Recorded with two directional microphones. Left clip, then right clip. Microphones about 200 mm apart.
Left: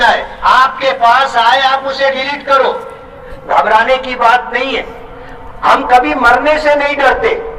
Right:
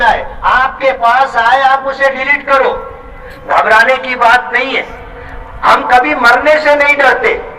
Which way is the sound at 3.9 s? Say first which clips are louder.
Right 1 dB; 50° left (ahead or behind).